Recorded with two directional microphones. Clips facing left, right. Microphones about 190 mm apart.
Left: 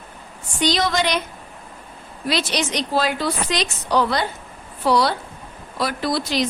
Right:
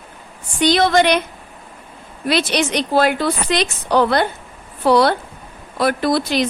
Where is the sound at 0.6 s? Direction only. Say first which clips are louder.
Right 6 dB; 60° right (ahead or behind).